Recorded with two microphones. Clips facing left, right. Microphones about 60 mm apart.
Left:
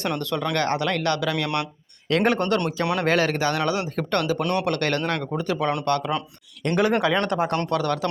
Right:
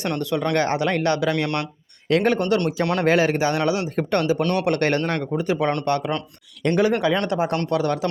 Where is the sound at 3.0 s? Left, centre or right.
Centre.